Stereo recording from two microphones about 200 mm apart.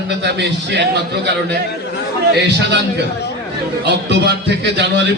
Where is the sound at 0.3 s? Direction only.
60° right (ahead or behind).